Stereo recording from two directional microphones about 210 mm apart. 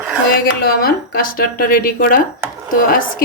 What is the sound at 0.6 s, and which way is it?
Speech, 45° left (ahead or behind).